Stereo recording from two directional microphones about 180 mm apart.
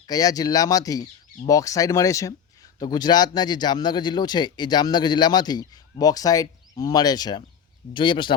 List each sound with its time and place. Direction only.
0.1 s a man's voice: 20° left (ahead or behind)